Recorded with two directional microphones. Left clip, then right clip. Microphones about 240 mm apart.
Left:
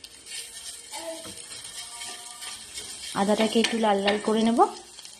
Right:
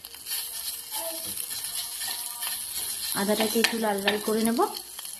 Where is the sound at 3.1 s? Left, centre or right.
Centre.